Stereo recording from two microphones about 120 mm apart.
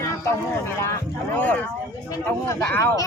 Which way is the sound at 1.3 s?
15° left (ahead or behind).